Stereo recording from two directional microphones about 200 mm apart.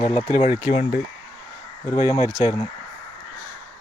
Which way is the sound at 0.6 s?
30° left (ahead or behind).